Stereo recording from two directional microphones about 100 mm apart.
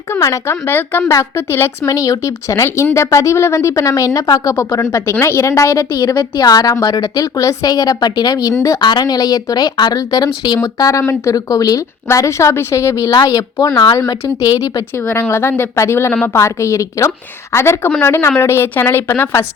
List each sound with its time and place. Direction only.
0.1 s a woman's voice: 30° left (ahead or behind)
5.7 s a woman's voice: 45° left (ahead or behind)
8.8 s a woman's voice: 45° left (ahead or behind)
15.0 s a woman's voice: 25° left (ahead or behind)